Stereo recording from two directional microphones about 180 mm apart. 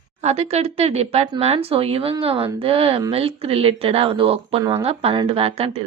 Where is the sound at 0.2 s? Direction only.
35° right (ahead or behind).